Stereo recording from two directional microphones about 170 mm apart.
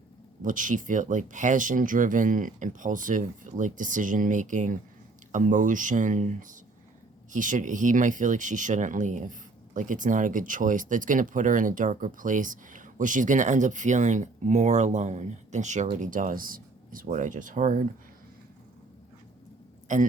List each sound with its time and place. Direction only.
0.4 s speech: 50° right (ahead or behind)
19.9 s speech: 45° right (ahead or behind)